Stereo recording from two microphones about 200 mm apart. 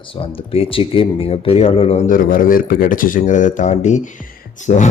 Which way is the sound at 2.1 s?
45° left (ahead or behind).